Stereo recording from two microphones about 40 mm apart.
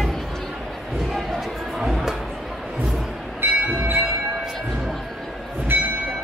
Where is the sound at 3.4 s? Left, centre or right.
Right.